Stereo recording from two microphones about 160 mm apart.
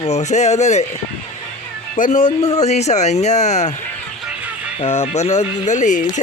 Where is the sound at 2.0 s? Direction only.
50° left (ahead or behind).